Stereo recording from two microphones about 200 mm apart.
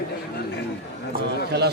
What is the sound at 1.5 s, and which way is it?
Speech, 60° right (ahead or behind).